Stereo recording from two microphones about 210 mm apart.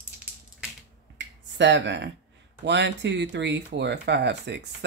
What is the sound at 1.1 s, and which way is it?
Finger snapping, 55° right (ahead or behind).